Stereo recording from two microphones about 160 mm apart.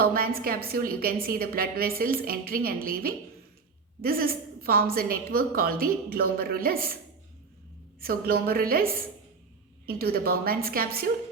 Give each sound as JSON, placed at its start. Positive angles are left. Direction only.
{"t": 0.0, "sound": "a woman's voice", "side_deg": -65}
{"t": 8.0, "sound": "a woman's voice", "side_deg": -70}